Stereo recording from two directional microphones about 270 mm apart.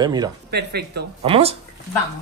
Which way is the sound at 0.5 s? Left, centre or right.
Right.